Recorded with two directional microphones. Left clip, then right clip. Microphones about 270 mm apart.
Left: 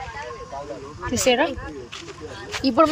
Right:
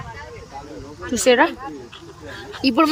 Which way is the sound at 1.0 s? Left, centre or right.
Centre.